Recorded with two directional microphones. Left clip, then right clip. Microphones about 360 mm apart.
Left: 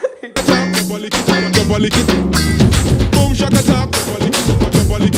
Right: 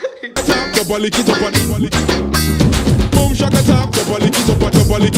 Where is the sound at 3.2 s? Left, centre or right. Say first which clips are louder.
Even; left.